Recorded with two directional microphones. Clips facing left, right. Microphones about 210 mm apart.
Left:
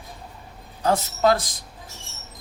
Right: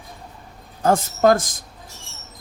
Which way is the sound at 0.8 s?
50° right (ahead or behind).